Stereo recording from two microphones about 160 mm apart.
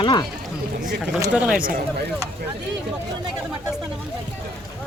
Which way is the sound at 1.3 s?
5° right (ahead or behind).